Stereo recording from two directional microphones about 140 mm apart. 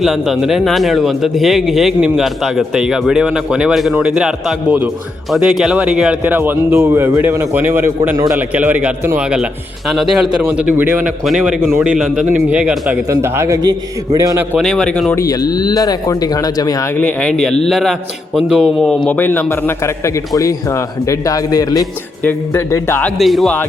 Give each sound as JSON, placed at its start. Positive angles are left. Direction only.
{"t": 0.0, "sound": "a man's voice", "side_deg": 0}
{"t": 11.2, "sound": "a man's voice", "side_deg": 0}
{"t": 13.1, "sound": "a man's voice", "side_deg": -20}
{"t": 14.6, "sound": "speech", "side_deg": 5}
{"t": 15.1, "sound": "a man's voice", "side_deg": 25}
{"t": 17.0, "sound": "speech", "side_deg": 10}
{"t": 19.0, "sound": "a man's voice", "side_deg": 10}
{"t": 22.2, "sound": "a man's voice", "side_deg": 15}
{"t": 23.1, "sound": "speech", "side_deg": 0}